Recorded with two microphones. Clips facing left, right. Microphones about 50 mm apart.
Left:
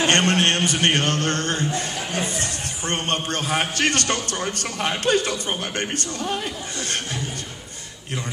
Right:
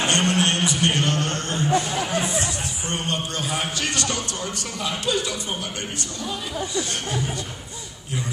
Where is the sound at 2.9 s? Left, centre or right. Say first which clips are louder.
Left 3 dB; left.